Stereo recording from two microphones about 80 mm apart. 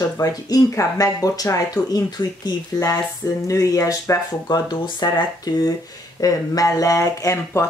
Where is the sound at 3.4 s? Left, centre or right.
Left.